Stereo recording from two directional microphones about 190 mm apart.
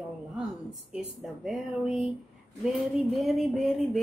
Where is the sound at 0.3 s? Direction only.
Centre (ahead or behind).